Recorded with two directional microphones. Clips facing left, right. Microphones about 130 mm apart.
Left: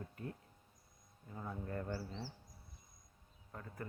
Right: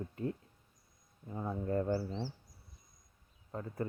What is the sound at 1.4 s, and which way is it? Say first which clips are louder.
Speech: right 9 dB; 30° right (ahead or behind).